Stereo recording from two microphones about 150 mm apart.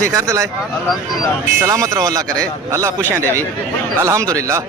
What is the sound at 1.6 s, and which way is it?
A man's voice, 20° right (ahead or behind).